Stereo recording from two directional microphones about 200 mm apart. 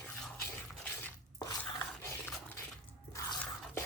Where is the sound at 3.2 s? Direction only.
15° left (ahead or behind).